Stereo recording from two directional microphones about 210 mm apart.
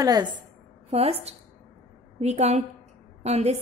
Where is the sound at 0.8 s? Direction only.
30° right (ahead or behind).